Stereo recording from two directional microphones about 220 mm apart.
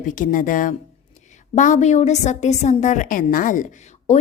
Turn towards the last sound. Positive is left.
turn(degrees=30)  # may be behind; listen again after turning